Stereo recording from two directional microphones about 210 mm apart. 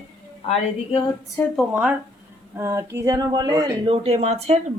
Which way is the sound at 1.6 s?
5° right (ahead or behind).